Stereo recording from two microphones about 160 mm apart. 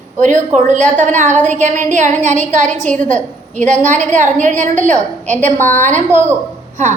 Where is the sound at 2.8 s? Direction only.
10° left (ahead or behind).